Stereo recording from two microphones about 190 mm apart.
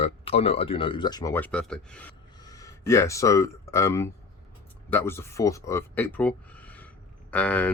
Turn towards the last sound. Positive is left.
turn(degrees=5)  # may be behind; listen again after turning